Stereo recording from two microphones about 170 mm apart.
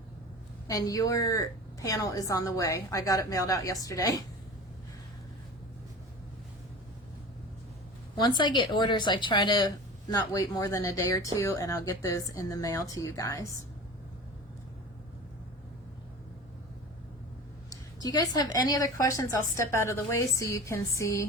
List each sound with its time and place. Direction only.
0.7 s a woman's voice: 20° left (ahead or behind)
8.2 s a woman's voice: 25° left (ahead or behind)
17.7 s a woman's voice: 20° left (ahead or behind)